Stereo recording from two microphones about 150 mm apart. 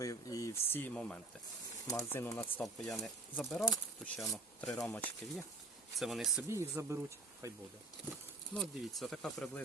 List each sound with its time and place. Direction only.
0.0 s speech: 20° left (ahead or behind)
2.9 s speech: centre (ahead or behind)
6.5 s speech: 20° right (ahead or behind)
8.5 s speech: centre (ahead or behind)